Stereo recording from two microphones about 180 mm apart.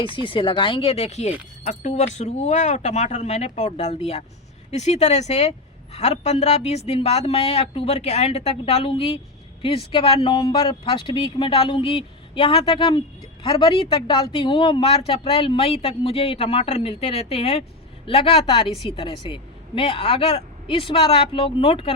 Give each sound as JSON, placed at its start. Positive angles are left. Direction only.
{"t": 0.0, "sound": "a woman's voice", "side_deg": 30}